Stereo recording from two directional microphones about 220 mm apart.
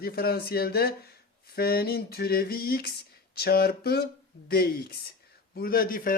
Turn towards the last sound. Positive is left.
turn(degrees=40)  # may be behind; listen again after turning